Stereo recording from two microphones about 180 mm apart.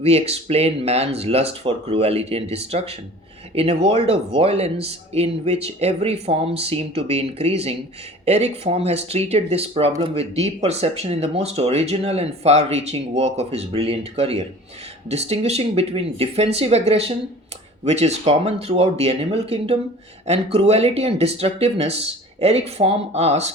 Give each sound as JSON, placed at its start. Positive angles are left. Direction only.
{"t": 0.0, "sound": "speech", "side_deg": -35}